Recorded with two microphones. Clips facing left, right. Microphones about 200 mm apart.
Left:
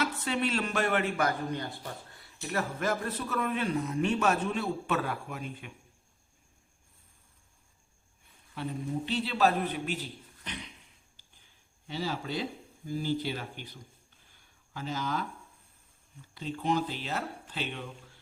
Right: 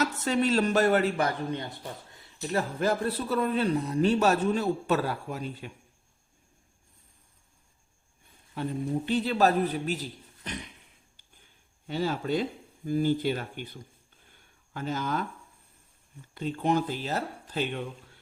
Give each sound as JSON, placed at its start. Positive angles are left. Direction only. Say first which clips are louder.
{"t": 0.0, "sound": "a man's voice", "louder": "right 4 dB", "side_deg": -40}
{"t": 9.0, "sound": "speech", "louder": "right 3 dB", "side_deg": -45}
{"t": 11.9, "sound": "speech", "louder": "right 6 dB", "side_deg": -50}
{"t": 16.3, "sound": "speech", "louder": "right 4 dB", "side_deg": -55}